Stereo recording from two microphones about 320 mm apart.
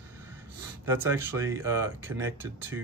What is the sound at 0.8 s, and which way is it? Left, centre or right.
Speech, centre.